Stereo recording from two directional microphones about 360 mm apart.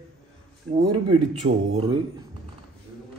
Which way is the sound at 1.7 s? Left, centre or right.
Centre.